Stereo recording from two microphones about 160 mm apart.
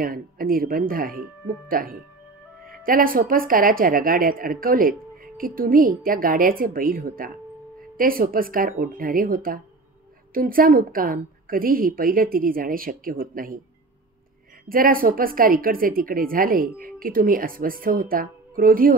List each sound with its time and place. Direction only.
0.0 s speech: 65° right (ahead or behind)
14.7 s speech: 60° right (ahead or behind)